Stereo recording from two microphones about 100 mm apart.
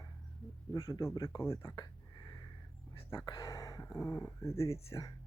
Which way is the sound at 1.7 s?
40° left (ahead or behind).